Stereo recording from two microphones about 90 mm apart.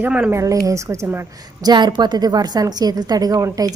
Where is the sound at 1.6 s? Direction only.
55° right (ahead or behind).